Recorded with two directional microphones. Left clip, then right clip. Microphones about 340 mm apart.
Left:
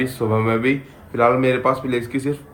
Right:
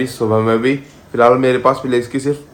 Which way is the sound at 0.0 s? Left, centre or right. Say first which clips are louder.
Right 5 dB; centre.